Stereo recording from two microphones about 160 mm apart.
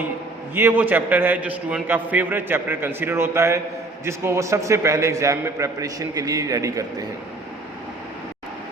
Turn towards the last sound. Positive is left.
turn(degrees=-20)  # may be behind; listen again after turning